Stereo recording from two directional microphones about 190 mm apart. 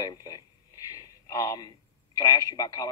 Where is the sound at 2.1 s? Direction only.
20° left (ahead or behind).